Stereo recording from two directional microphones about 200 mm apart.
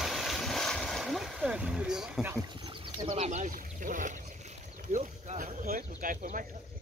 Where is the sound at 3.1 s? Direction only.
35° right (ahead or behind).